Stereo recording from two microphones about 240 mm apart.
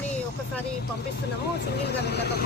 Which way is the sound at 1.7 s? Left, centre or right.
Left.